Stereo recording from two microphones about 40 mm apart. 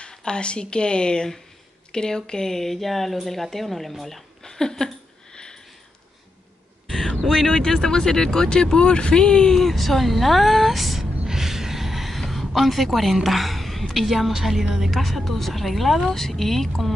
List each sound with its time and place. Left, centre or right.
0.1 s speech: left
2.5 s a woman's voice: centre
5.3 s sniff: centre
6.9 s a sound: centre
7.6 s speech: centre
9.6 s a woman's voice: centre
11.2 s gasp: centre
14.8 s a woman's voice: centre